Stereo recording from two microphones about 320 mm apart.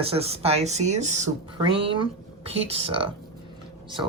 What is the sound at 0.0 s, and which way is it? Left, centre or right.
Speech, centre.